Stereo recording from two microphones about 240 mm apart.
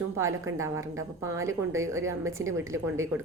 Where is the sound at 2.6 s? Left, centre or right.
Centre.